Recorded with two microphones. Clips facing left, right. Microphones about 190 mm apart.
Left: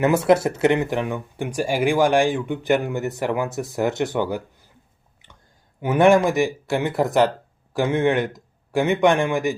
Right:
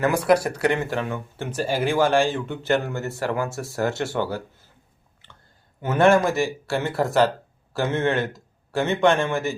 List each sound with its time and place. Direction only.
0.0 s speech: 25° left (ahead or behind)
5.2 s a sound: 15° left (ahead or behind)
5.8 s a man's voice: 15° left (ahead or behind)